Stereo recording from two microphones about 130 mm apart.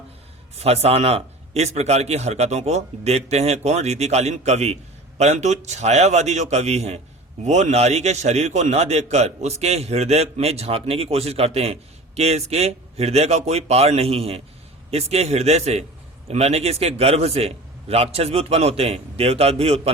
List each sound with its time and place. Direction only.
0.5 s a man's voice: 55° right (ahead or behind)